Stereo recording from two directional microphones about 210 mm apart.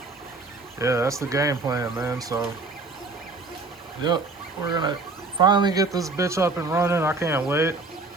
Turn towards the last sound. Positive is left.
turn(degrees=-10)  # may be behind; listen again after turning